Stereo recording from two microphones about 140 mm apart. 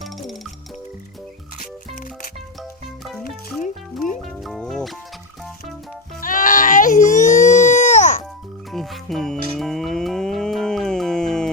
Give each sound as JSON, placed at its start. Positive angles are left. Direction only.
{"t": 0.0, "sound": "music", "side_deg": 0}
{"t": 3.0, "sound": "music", "side_deg": 0}
{"t": 6.1, "sound": "baby cry", "side_deg": 75}
{"t": 8.7, "sound": "music", "side_deg": 0}